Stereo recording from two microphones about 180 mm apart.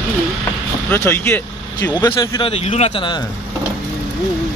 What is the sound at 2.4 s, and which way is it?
Speech, 30° left (ahead or behind).